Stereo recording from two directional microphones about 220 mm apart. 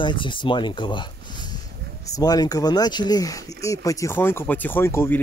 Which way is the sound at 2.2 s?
15° left (ahead or behind).